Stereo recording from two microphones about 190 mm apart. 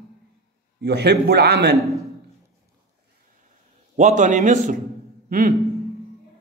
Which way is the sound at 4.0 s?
40° right (ahead or behind).